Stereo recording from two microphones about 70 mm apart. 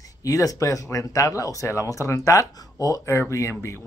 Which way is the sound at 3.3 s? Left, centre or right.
Left.